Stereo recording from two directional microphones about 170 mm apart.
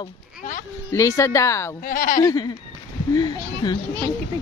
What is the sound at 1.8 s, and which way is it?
Speech, 55° left (ahead or behind).